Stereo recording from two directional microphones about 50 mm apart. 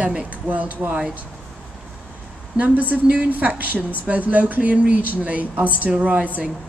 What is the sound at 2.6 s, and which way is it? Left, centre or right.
Speech, right.